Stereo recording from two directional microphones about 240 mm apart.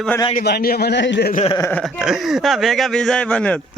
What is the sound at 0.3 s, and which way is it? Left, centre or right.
A man's voice, left.